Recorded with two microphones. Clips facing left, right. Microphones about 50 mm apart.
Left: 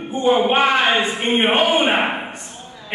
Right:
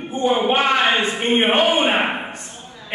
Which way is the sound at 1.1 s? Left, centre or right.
Centre.